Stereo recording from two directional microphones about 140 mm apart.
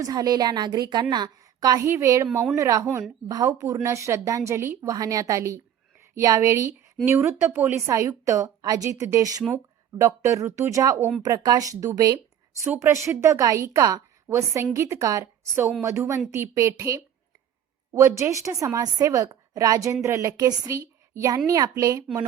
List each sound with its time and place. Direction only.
0.0 s speech: 25° right (ahead or behind)